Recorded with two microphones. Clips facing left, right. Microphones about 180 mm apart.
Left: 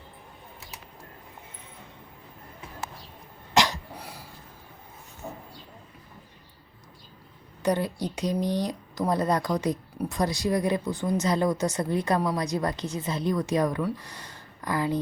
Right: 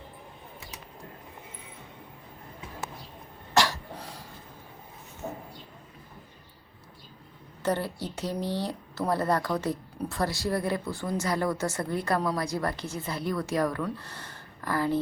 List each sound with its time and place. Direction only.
3.5 s cough: 15° left (ahead or behind)
7.6 s speech: 15° left (ahead or behind)